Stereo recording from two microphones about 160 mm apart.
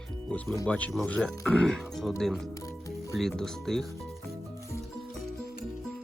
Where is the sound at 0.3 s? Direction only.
15° left (ahead or behind).